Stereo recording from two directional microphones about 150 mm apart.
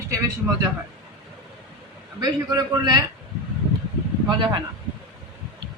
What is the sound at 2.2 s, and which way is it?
Speech, 25° right (ahead or behind).